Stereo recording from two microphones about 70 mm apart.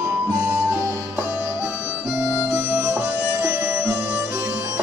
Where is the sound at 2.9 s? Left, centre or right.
Right.